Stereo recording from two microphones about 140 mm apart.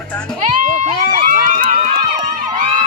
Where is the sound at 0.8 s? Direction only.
70° right (ahead or behind).